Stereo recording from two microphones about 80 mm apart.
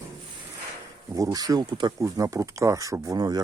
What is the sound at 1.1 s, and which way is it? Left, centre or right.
Speech, right.